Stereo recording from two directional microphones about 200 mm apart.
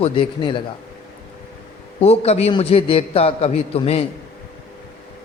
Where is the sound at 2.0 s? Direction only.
30° left (ahead or behind).